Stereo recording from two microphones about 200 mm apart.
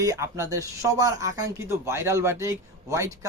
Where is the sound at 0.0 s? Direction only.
15° right (ahead or behind).